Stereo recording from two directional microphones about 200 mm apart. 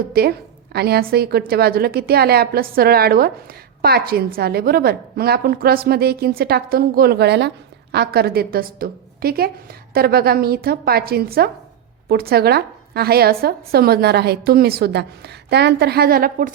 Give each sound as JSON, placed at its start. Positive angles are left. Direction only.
{"t": 0.1, "sound": "a woman's voice", "side_deg": -50}